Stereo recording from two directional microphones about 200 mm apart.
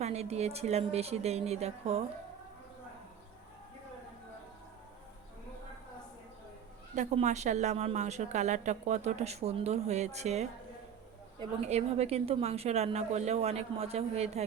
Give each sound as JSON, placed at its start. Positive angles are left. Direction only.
{"t": 0.0, "sound": "a woman's voice", "side_deg": -30}
{"t": 6.9, "sound": "a woman's voice", "side_deg": -35}